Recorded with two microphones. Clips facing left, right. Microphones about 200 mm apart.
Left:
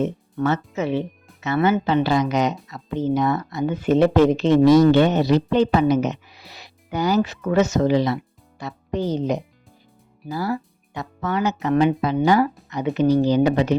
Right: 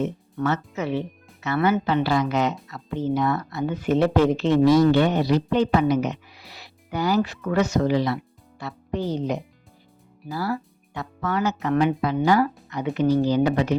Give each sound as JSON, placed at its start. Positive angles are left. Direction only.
{"t": 0.3, "sound": "speech", "side_deg": 25}
{"t": 10.2, "sound": "speech", "side_deg": 20}